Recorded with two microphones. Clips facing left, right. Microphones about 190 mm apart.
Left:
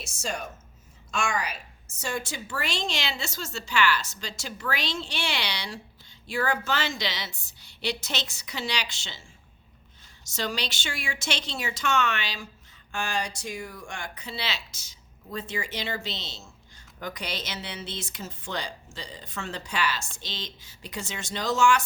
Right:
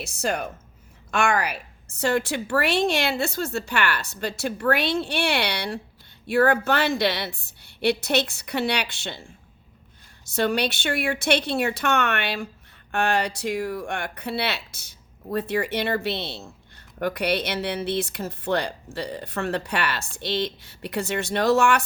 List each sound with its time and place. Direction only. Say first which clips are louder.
0.0 s speech: right 7 dB; 60° right (ahead or behind)